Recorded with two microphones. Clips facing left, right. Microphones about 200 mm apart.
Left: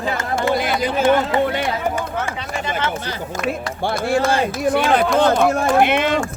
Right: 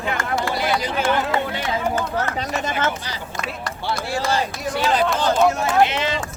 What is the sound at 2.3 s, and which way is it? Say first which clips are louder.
Speech: right 2 dB; 40° right (ahead or behind).